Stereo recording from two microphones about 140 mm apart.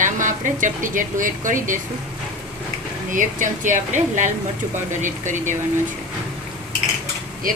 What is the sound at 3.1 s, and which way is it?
Speech, 70° right (ahead or behind).